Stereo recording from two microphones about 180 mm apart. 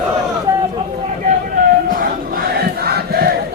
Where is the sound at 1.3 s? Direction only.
50° right (ahead or behind).